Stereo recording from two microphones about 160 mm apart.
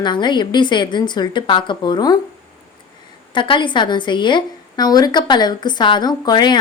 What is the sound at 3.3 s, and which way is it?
A woman's voice, 30° left (ahead or behind).